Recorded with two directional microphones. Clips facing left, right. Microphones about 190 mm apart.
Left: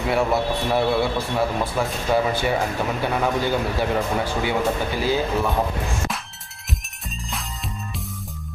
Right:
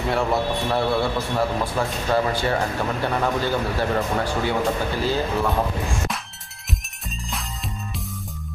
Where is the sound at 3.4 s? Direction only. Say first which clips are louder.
Left 1 dB; 10° left (ahead or behind).